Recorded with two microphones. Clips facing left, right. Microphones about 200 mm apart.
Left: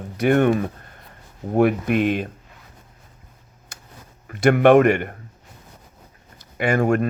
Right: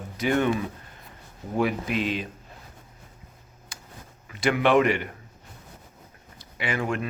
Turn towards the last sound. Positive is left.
turn(degrees=45)  # may be behind; listen again after turning